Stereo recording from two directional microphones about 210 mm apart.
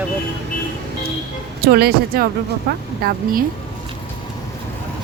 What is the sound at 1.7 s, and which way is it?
Speech, 45° right (ahead or behind).